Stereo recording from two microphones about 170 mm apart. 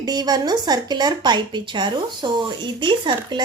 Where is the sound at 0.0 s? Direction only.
25° right (ahead or behind).